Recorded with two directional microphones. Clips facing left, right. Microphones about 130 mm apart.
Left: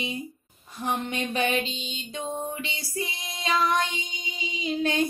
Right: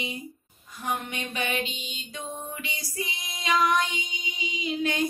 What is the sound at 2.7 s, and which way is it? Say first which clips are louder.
Child singing: left 2 dB; 30° left (ahead or behind).